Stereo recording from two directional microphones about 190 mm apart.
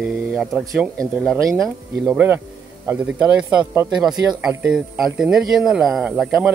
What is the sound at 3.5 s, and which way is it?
Speech, 20° right (ahead or behind).